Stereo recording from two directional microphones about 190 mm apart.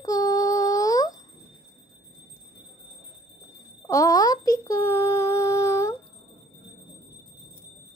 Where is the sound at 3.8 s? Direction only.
20° left (ahead or behind).